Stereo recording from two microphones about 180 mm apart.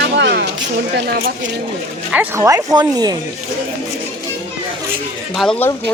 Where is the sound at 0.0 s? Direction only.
70° right (ahead or behind).